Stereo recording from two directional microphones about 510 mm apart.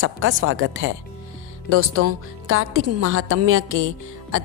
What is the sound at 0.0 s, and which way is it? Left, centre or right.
A woman's voice, right.